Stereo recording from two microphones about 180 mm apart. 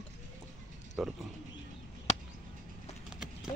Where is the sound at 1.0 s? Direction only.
Centre (ahead or behind).